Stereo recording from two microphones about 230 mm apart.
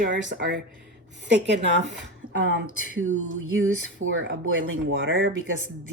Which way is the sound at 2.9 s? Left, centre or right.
Right.